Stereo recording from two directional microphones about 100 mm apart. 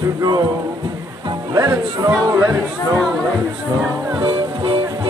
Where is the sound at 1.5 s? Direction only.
35° right (ahead or behind).